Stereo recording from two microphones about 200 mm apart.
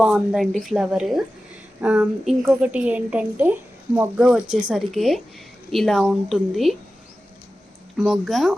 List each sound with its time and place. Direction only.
0.0 s a woman's voice: 5° right (ahead or behind)
7.9 s a woman's voice: centre (ahead or behind)